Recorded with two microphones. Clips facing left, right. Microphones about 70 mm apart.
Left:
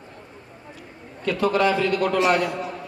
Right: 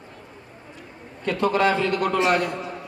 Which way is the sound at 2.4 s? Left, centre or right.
Centre.